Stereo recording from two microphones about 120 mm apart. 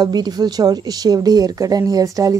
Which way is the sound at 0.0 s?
35° right (ahead or behind).